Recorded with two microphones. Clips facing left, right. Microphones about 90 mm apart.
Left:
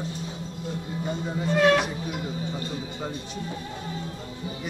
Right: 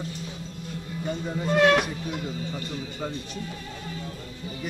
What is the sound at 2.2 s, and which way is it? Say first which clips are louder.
Speech: left 1 dB; 25° left (ahead or behind).